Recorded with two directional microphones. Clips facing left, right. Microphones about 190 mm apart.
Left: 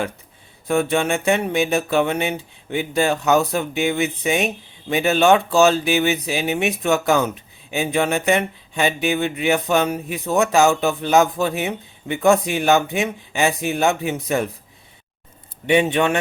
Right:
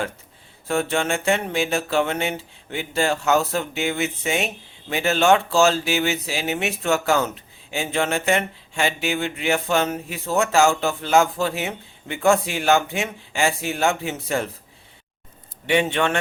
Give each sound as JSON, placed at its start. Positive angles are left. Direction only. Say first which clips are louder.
{"t": 0.7, "sound": "speech", "louder": "left 3 dB", "side_deg": 15}
{"t": 15.6, "sound": "speech", "louder": "left 3 dB", "side_deg": 20}